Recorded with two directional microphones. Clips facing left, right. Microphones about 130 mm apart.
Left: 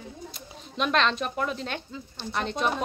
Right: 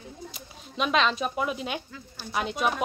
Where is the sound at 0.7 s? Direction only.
5° right (ahead or behind).